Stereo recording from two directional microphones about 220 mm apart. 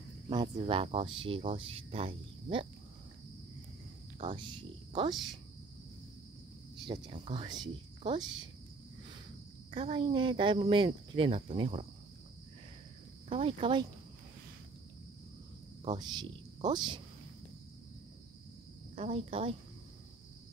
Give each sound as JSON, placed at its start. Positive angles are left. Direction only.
{"t": 0.3, "sound": "speech", "side_deg": -20}
{"t": 4.2, "sound": "speech", "side_deg": -25}
{"t": 6.9, "sound": "speech", "side_deg": -25}
{"t": 9.7, "sound": "speech", "side_deg": -25}
{"t": 13.3, "sound": "speech", "side_deg": -25}
{"t": 15.8, "sound": "speech", "side_deg": -20}
{"t": 18.9, "sound": "speech", "side_deg": -30}